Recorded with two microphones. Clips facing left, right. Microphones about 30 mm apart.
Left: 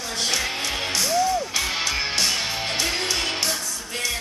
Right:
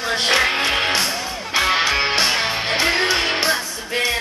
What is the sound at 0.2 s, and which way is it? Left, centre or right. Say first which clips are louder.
Music: right 7 dB; right.